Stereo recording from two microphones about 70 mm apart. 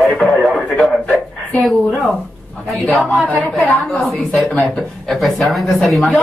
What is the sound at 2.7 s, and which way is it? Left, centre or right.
A man's voice, centre.